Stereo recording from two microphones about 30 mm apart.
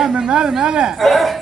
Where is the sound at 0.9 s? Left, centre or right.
Centre.